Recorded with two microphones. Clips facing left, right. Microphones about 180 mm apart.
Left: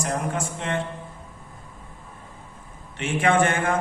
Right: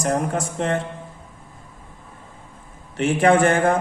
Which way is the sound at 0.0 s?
40° right (ahead or behind).